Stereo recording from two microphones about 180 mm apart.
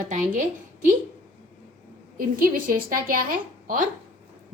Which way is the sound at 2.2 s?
55° right (ahead or behind).